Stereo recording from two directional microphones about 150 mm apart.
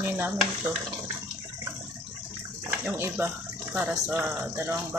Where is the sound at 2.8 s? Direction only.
15° right (ahead or behind).